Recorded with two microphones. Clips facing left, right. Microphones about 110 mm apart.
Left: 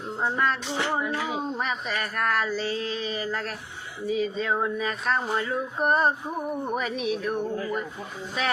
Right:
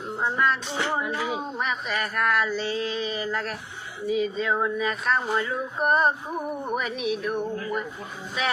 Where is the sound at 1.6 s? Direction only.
35° left (ahead or behind).